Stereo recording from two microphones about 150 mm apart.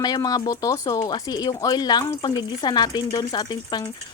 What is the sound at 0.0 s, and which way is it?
Speech, 25° left (ahead or behind).